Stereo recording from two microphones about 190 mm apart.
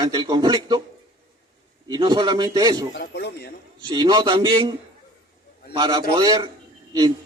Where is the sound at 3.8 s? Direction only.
25° right (ahead or behind).